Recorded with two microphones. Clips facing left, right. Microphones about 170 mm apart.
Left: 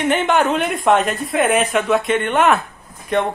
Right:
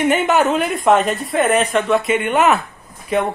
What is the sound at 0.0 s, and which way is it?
A woman's voice, 5° right (ahead or behind).